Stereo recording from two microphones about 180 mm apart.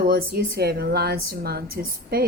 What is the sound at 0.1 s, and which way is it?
A woman's voice, 60° right (ahead or behind).